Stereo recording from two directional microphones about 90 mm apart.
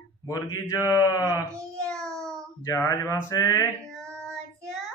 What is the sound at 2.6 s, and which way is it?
Speech, 30° left (ahead or behind).